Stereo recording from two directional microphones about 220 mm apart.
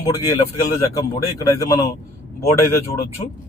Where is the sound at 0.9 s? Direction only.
15° left (ahead or behind).